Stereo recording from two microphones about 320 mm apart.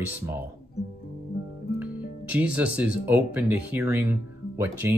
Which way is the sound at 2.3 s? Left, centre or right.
Centre.